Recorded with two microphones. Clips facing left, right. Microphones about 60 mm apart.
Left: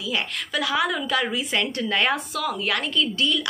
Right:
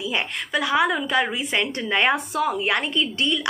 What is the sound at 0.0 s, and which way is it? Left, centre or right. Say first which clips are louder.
Speech: right 1 dB; right.